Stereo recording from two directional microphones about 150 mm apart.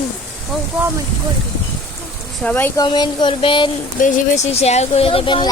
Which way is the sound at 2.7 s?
30° left (ahead or behind).